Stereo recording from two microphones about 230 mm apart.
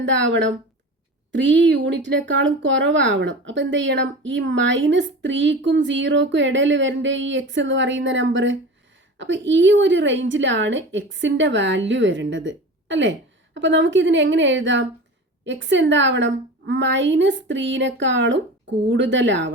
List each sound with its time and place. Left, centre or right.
0.0 s speech: right